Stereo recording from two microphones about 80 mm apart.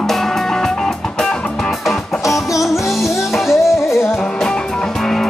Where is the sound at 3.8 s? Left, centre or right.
Left.